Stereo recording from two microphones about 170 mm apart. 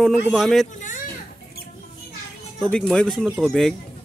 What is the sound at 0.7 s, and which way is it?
Children playing, 50° left (ahead or behind).